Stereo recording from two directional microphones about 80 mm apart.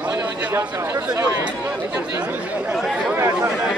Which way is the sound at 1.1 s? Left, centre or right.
Right.